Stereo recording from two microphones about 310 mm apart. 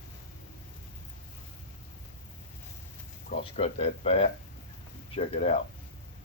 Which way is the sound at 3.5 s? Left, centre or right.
Centre.